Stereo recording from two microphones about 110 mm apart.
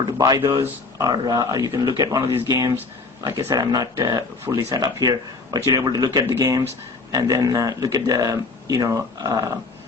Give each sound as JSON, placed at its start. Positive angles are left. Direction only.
{"t": 0.2, "sound": "a man's voice", "side_deg": -40}